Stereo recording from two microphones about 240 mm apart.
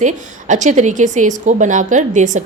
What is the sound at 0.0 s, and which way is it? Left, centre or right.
A woman's voice, right.